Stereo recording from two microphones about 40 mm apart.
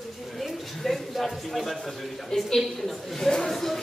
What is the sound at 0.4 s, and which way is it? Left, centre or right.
A woman's voice, centre.